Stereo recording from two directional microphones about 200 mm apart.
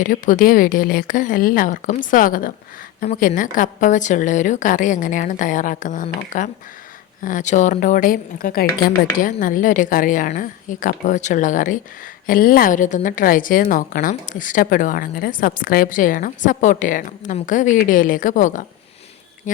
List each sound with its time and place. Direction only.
0.0 s a woman's voice: 45° left (ahead or behind)